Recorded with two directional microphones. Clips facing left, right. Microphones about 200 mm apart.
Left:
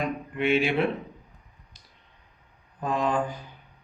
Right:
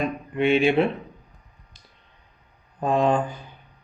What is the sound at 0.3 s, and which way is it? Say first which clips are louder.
Speech: right 5 dB; 25° right (ahead or behind).